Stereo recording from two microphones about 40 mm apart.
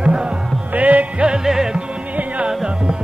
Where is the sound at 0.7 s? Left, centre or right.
Right.